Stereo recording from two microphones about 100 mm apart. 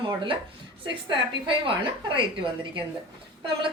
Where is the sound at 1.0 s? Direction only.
55° right (ahead or behind).